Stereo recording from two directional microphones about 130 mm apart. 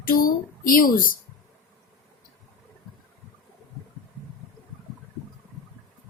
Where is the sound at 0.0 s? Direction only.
90° left.